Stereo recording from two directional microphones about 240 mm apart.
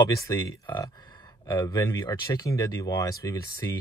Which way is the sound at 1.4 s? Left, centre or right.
Centre.